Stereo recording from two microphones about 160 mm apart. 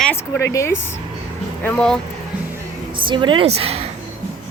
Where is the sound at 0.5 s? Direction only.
15° left (ahead or behind).